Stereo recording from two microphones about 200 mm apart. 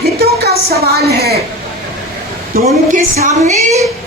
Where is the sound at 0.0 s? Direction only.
50° right (ahead or behind).